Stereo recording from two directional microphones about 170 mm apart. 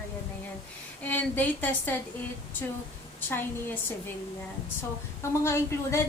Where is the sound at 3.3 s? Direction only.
10° left (ahead or behind).